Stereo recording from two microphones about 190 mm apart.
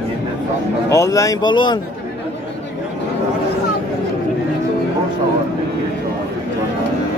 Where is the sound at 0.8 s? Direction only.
15° left (ahead or behind).